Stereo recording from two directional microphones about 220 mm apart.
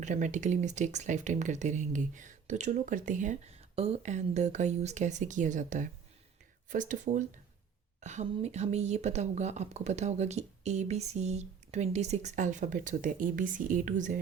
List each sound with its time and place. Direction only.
0.0 s a woman's voice: 35° right (ahead or behind)